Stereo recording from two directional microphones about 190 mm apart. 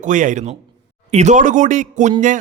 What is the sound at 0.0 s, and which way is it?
A man's voice, 40° right (ahead or behind).